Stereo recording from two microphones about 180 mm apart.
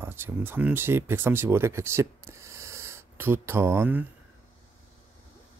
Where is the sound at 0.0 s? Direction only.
10° right (ahead or behind).